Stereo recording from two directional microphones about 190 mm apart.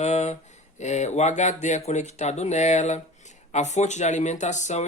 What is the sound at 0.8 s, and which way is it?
Speech, 35° left (ahead or behind).